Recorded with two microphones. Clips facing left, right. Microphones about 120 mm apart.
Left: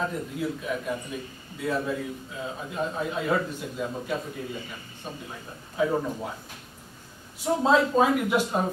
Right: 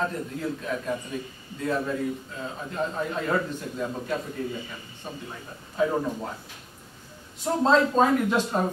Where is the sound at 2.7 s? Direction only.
10° left (ahead or behind).